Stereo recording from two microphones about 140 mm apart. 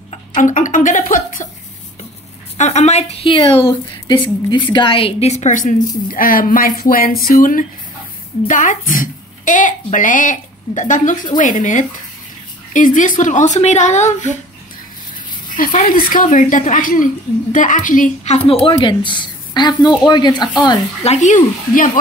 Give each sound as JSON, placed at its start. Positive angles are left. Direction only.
{"t": 0.4, "sound": "a woman's voice", "side_deg": 65}
{"t": 2.5, "sound": "a woman's voice", "side_deg": 55}
{"t": 8.5, "sound": "a woman's voice", "side_deg": 65}
{"t": 15.5, "sound": "a woman's voice", "side_deg": 75}
{"t": 21.0, "sound": "speech", "side_deg": 55}